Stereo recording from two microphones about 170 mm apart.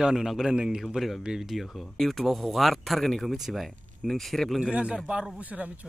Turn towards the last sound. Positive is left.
turn(degrees=-10)  # may be behind; listen again after turning